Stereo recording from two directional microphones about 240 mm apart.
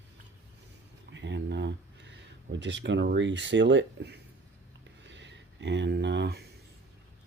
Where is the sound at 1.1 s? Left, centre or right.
Right.